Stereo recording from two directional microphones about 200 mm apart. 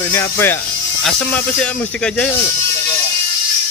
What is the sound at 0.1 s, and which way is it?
Speech, 10° left (ahead or behind).